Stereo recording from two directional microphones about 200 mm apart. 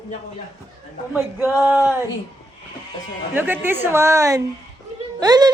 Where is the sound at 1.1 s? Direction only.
10° right (ahead or behind).